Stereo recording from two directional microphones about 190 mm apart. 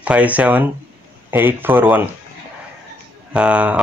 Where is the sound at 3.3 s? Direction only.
5° right (ahead or behind).